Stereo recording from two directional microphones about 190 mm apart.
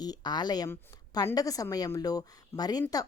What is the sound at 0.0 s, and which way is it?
Speech, 20° left (ahead or behind).